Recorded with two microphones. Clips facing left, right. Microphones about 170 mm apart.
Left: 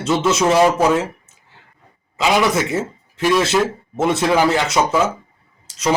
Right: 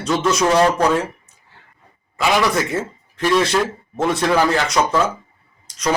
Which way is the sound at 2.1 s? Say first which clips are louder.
Left 1 dB; 20° left (ahead or behind).